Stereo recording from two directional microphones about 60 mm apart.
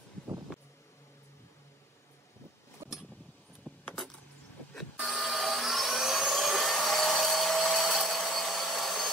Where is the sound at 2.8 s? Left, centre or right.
Right.